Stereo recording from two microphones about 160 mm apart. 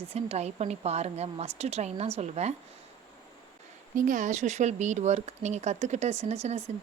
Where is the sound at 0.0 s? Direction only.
40° right (ahead or behind).